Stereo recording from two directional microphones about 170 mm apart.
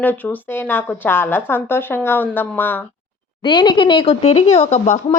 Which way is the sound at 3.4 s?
25° left (ahead or behind).